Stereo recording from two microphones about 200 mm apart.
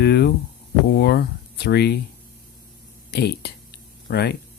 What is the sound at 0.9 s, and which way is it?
Speech, 50° left (ahead or behind).